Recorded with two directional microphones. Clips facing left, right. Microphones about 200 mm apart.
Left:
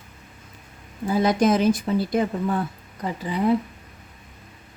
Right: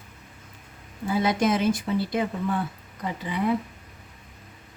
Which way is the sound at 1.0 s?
40° left (ahead or behind).